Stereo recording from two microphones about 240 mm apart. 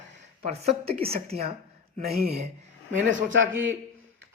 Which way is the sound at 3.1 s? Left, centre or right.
Right.